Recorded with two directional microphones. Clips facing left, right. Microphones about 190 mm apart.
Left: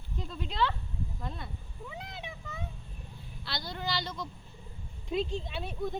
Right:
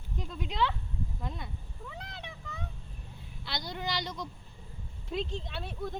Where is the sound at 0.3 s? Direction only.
10° right (ahead or behind).